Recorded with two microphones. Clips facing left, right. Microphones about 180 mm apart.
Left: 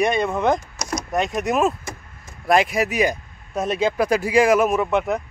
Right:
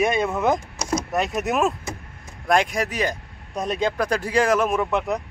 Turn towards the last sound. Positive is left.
turn(degrees=0)  # may be behind; listen again after turning